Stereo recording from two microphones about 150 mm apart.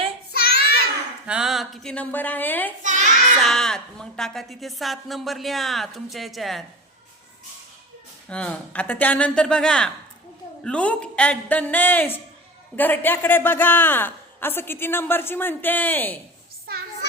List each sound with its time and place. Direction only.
0.3 s child singing: 90° left
1.3 s a woman's voice: 5° right (ahead or behind); by 2.7 s 10° left (ahead or behind)
2.8 s child singing: 55° right (ahead or behind)
3.4 s a woman's voice: 5° left (ahead or behind)
8.3 s a woman's voice: 10° left (ahead or behind)